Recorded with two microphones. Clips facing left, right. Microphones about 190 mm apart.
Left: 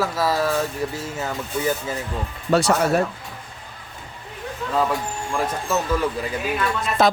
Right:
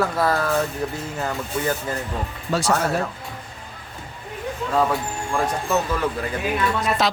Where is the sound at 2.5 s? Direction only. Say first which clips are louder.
Left 4 dB; 65° left (ahead or behind).